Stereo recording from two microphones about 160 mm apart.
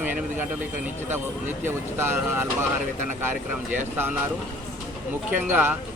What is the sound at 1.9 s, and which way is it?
Speech, 15° right (ahead or behind).